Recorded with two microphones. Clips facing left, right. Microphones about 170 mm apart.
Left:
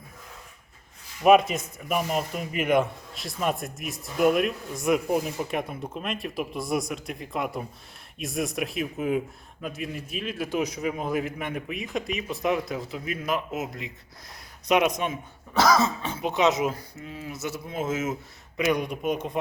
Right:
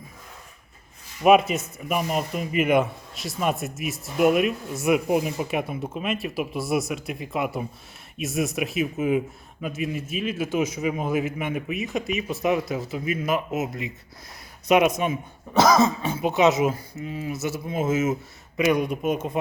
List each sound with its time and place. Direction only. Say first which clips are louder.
1.2 s a man's voice: right 1 dB; 5° right (ahead or behind)
15.5 s cough: right 3 dB; 20° right (ahead or behind)
16.0 s a man's voice: right 4 dB; 5° right (ahead or behind)